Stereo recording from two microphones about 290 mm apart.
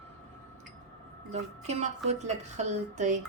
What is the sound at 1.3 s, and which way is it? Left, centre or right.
Speech, right.